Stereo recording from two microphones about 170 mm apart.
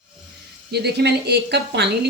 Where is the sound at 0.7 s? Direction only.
75° right (ahead or behind).